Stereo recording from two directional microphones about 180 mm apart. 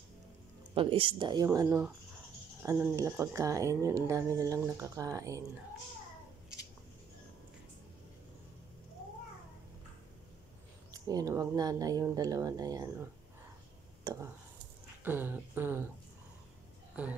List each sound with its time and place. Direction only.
0.7 s speech: 30° right (ahead or behind)
10.9 s speech: 20° right (ahead or behind)
15.0 s speech: 10° right (ahead or behind)